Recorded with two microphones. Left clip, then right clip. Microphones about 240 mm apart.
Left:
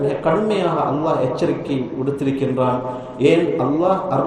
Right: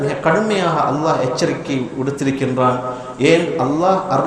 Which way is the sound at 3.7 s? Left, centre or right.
Right.